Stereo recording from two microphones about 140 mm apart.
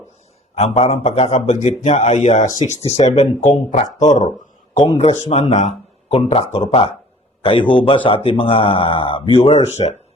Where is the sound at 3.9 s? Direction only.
60° left (ahead or behind).